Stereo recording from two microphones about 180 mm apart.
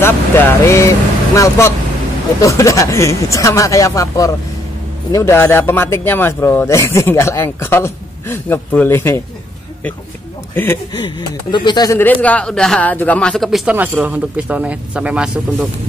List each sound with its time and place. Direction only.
0.0 s vehicle: 15° left (ahead or behind)
2.4 s speech: 15° left (ahead or behind)
10.5 s speech: 10° left (ahead or behind)
11.0 s speech: 25° left (ahead or behind); by 15.4 s 5° right (ahead or behind)